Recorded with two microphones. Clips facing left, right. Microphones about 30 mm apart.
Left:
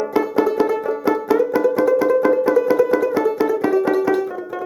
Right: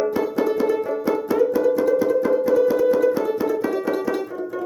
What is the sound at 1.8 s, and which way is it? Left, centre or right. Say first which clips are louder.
Music: left 3 dB; left.